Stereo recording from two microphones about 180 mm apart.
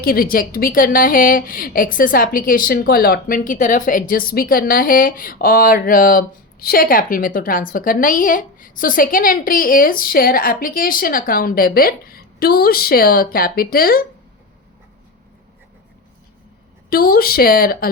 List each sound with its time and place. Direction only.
0.0 s speech: 55° left (ahead or behind)
16.9 s speech: 55° left (ahead or behind)